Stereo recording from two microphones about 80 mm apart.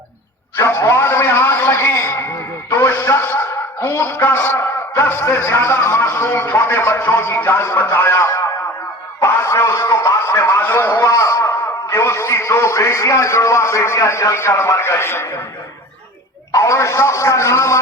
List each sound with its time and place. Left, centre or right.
0.5 s a sound: left
2.6 s a man's voice: left
11.0 s a man's voice: left
16.5 s a man's voice: left